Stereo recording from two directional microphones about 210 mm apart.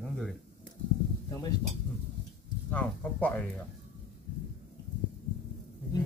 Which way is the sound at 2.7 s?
5° left (ahead or behind).